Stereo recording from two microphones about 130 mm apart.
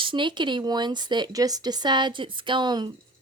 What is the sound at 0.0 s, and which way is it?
A woman's voice, 40° right (ahead or behind).